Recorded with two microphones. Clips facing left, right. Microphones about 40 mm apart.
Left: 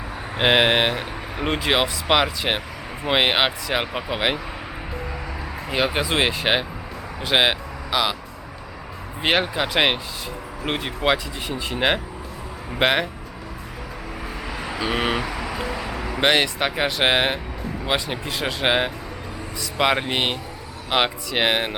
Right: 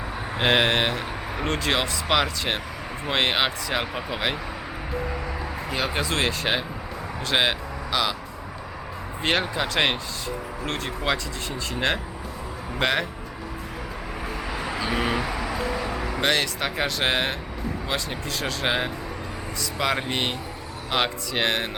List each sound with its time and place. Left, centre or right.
0.3 s speech: centre
5.6 s speech: centre
9.2 s speech: centre
12.8 s speech: left
14.4 s vehicle: centre
14.9 s vehicle: left
15.2 s a sound: centre
16.2 s speech: left